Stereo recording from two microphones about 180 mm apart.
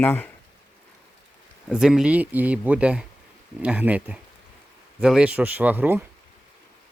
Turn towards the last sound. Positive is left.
turn(degrees=-10)  # may be behind; listen again after turning